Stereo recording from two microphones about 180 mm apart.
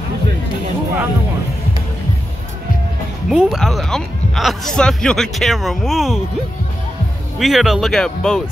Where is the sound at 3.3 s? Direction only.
5° right (ahead or behind).